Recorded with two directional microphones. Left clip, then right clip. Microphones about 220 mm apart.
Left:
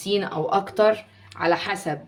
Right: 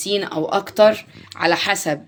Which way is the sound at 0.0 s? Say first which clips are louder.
Right 3 dB; 35° right (ahead or behind).